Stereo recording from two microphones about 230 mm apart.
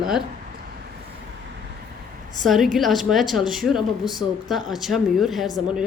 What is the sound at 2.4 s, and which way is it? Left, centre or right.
Speech, centre.